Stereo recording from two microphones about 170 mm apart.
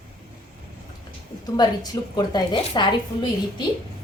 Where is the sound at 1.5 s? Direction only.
25° left (ahead or behind).